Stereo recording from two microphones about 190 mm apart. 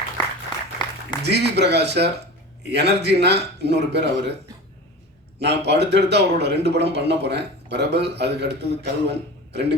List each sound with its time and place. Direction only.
0.8 s a sound: 20° left (ahead or behind)
1.2 s speech: 60° right (ahead or behind)
5.4 s speech: 60° right (ahead or behind)